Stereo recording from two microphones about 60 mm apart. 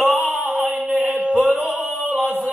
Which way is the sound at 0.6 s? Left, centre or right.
Right.